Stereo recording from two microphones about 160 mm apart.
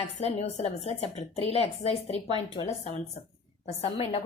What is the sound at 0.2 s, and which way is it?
A woman's voice, 40° left (ahead or behind).